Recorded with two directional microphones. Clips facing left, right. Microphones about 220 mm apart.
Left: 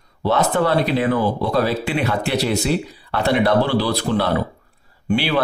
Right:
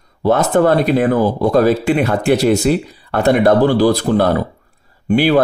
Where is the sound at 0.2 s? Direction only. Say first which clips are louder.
Right 5 dB; 45° right (ahead or behind).